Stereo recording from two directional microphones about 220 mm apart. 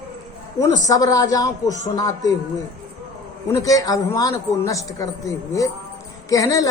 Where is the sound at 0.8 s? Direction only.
15° left (ahead or behind).